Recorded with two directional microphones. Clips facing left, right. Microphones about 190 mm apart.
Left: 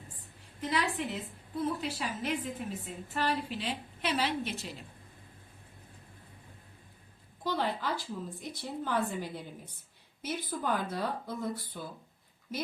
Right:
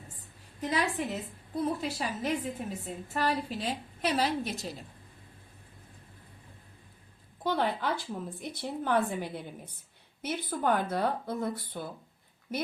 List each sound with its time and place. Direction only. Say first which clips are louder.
0.7 s a woman's voice: right 2 dB; 40° right (ahead or behind)
7.4 s a woman's voice: right 3 dB; 60° right (ahead or behind)